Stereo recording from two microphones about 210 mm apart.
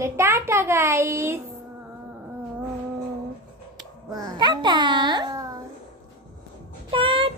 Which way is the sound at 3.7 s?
20° right (ahead or behind).